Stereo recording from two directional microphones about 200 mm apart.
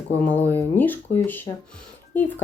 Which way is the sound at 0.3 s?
10° left (ahead or behind).